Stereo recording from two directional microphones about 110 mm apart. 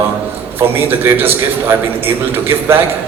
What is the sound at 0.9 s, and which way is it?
A man's voice, 20° right (ahead or behind).